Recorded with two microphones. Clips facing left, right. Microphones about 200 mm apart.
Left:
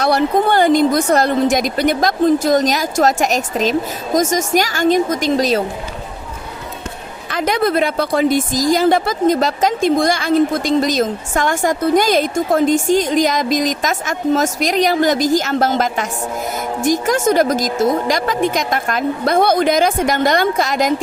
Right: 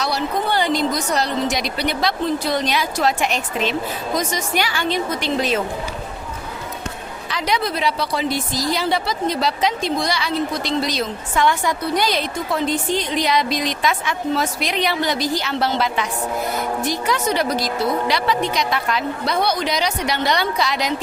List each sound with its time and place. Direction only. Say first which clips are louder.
0.0 s speech: left 8 dB; 55° left (ahead or behind)
7.3 s speech: left 6 dB; 50° left (ahead or behind)